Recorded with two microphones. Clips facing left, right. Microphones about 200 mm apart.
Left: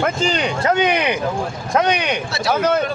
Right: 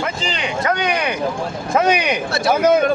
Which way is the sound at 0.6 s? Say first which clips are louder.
Left 2 dB; 25° left (ahead or behind).